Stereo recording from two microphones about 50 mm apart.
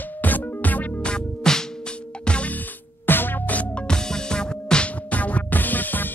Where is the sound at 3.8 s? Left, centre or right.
Centre.